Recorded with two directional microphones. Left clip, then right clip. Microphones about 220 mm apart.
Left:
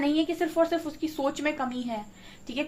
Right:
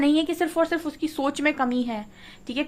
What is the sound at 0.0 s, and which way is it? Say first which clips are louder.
A woman's voice: right 4 dB; 45° right (ahead or behind).